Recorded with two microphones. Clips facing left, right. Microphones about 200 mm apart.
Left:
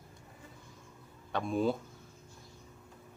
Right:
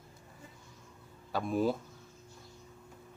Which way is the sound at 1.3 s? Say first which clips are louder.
Even; 5° right (ahead or behind).